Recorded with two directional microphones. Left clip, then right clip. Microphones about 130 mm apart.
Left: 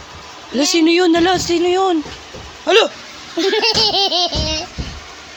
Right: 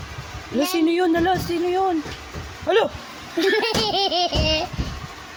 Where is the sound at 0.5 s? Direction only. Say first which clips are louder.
Left 6 dB; 20° left (ahead or behind).